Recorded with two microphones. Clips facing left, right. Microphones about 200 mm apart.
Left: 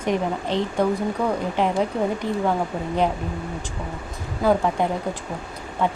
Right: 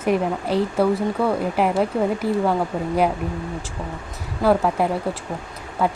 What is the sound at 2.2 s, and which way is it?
Speech, 35° right (ahead or behind).